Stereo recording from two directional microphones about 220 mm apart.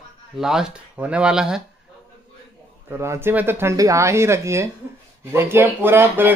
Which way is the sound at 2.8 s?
10° right (ahead or behind).